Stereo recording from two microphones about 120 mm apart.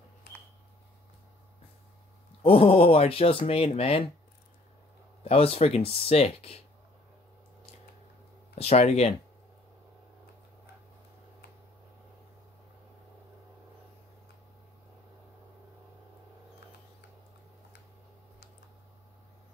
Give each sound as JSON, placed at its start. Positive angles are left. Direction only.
{"t": 2.4, "sound": "speech", "side_deg": 50}
{"t": 5.2, "sound": "speech", "side_deg": 55}
{"t": 8.5, "sound": "speech", "side_deg": 60}